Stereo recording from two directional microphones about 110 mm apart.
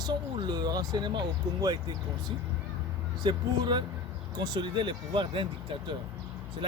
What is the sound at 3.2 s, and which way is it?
Speech, 45° right (ahead or behind).